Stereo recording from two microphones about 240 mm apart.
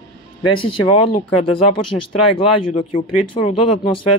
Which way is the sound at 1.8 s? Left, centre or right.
Left.